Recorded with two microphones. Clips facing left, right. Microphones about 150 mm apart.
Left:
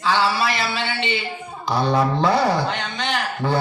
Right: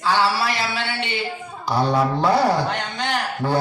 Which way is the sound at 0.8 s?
15° left (ahead or behind).